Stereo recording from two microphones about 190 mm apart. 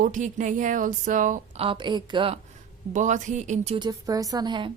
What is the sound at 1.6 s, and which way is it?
Speech, 25° right (ahead or behind).